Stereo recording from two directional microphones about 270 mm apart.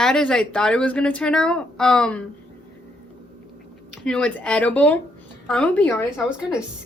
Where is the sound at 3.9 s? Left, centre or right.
Centre.